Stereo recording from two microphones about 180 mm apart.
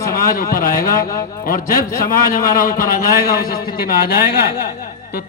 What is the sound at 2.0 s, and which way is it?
A man's voice, 50° left (ahead or behind).